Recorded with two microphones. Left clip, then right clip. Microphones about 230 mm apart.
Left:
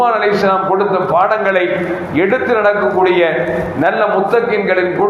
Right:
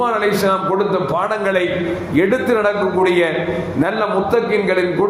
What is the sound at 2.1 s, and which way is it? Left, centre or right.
A man's voice, right.